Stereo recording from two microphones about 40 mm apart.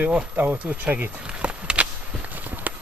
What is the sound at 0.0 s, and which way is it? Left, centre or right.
Speech, right.